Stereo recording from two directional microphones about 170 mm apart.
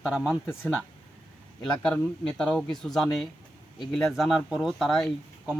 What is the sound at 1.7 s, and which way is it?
Speech, 5° left (ahead or behind).